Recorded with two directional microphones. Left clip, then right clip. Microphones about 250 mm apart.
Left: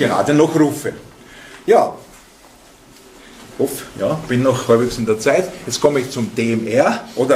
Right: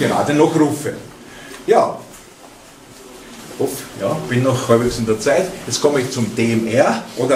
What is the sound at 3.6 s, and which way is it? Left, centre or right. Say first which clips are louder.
Speech: left 2 dB; left.